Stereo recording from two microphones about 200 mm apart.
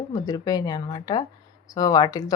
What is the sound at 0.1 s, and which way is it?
Speech, 20° left (ahead or behind).